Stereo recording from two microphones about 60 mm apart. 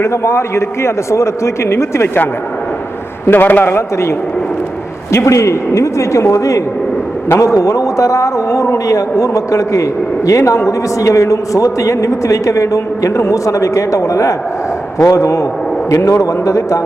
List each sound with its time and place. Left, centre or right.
0.0 s a man's voice: left
3.2 s a man's voice: left
3.7 s a man's voice: left
5.1 s a man's voice: left